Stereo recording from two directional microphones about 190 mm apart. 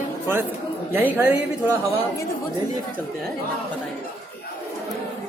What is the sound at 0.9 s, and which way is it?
Speech, 10° right (ahead or behind).